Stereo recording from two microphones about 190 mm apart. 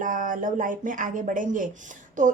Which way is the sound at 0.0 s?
45° right (ahead or behind).